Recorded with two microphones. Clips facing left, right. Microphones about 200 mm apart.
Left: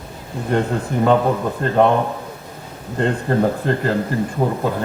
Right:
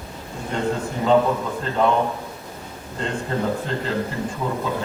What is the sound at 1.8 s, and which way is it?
Speech, 60° left (ahead or behind).